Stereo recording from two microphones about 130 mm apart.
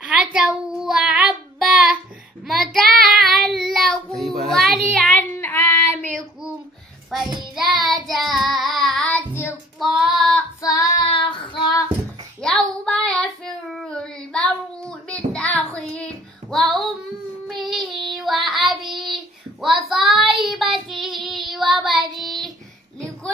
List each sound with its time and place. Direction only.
0.0 s child singing: 5° right (ahead or behind)
2.4 s child singing: centre (ahead or behind)
5.1 s child singing: 15° left (ahead or behind)
7.5 s child singing: centre (ahead or behind)
10.6 s child singing: 25° left (ahead or behind)
11.1 s child singing: 40° left (ahead or behind)
12.4 s child singing: 5° left (ahead or behind)